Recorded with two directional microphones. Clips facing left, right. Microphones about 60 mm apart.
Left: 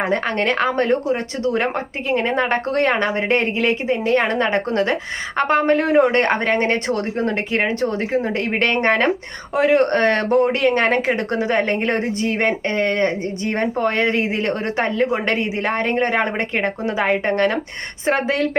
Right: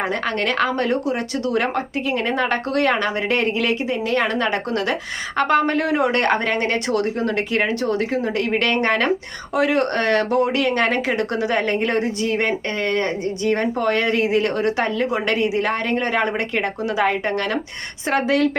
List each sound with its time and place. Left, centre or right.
0.0 s speech: left